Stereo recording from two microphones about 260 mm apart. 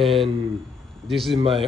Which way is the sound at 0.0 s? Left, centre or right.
Centre.